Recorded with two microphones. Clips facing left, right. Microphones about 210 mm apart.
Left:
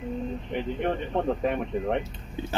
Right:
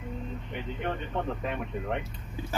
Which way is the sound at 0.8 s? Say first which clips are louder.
Left 5 dB; 40° left (ahead or behind).